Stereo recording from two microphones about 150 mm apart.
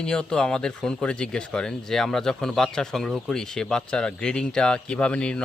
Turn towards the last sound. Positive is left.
turn(degrees=5)  # may be behind; listen again after turning